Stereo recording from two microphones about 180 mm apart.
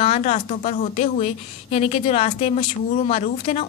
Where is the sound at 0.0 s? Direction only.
40° left (ahead or behind).